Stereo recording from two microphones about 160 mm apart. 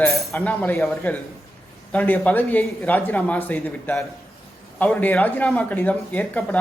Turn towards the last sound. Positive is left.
turn(degrees=10)  # may be behind; listen again after turning